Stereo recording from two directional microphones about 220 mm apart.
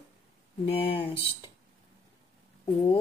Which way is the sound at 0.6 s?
25° left (ahead or behind).